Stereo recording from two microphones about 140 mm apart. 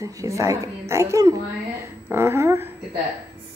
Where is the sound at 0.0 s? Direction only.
20° right (ahead or behind).